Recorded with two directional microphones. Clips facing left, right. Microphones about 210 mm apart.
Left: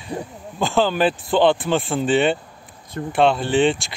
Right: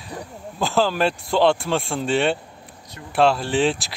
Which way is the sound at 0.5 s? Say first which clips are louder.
Left 1 dB; centre (ahead or behind).